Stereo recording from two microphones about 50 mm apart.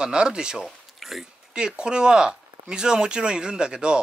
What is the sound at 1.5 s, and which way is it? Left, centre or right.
Speech, centre.